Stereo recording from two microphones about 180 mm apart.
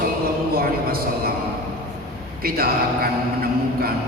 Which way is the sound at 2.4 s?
55° right (ahead or behind).